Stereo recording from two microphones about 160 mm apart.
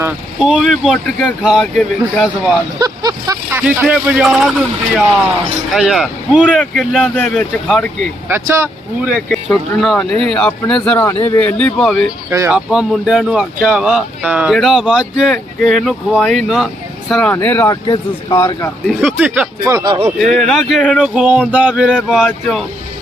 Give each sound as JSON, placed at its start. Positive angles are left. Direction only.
{"t": 0.3, "sound": "speech", "side_deg": -5}
{"t": 2.7, "sound": "vehicle", "side_deg": -25}
{"t": 3.6, "sound": "speech", "side_deg": -5}
{"t": 5.7, "sound": "speech", "side_deg": 0}
{"t": 8.3, "sound": "speech", "side_deg": -15}
{"t": 12.3, "sound": "speech", "side_deg": -20}
{"t": 12.5, "sound": "speech", "side_deg": -5}
{"t": 17.8, "sound": "speech", "side_deg": 30}
{"t": 18.3, "sound": "speech", "side_deg": 15}
{"t": 18.9, "sound": "speech", "side_deg": -5}
{"t": 19.8, "sound": "speech", "side_deg": -30}
{"t": 20.3, "sound": "speech", "side_deg": 5}